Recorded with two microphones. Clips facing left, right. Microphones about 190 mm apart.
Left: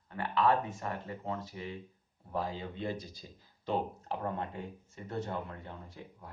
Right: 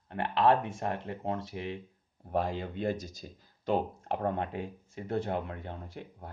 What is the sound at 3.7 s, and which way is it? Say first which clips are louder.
Speech: right 4 dB; 60° right (ahead or behind).